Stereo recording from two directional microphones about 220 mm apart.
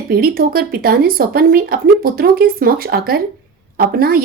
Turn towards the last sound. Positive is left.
turn(degrees=-45)  # may be behind; listen again after turning